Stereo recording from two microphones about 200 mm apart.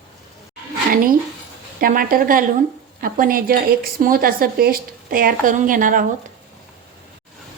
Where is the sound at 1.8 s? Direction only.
45° right (ahead or behind).